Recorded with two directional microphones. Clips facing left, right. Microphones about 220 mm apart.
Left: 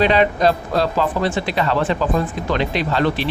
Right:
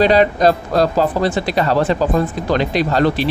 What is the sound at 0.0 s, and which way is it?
Speech, 40° right (ahead or behind).